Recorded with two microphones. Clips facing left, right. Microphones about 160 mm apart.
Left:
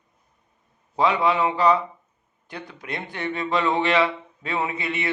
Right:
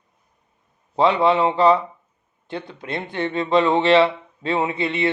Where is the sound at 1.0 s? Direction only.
25° right (ahead or behind).